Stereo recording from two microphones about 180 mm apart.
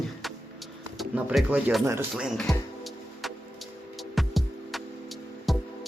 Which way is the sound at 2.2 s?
Centre (ahead or behind).